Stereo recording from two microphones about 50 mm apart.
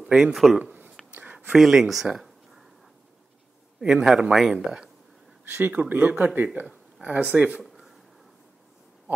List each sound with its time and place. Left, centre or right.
0.0 s speech: centre
1.1 s a sound: right
1.6 s speech: centre
3.8 s speech: centre
5.4 s speech: right